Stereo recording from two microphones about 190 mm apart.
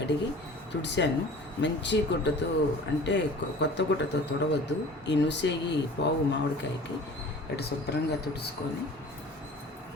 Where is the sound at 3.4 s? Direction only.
65° left (ahead or behind).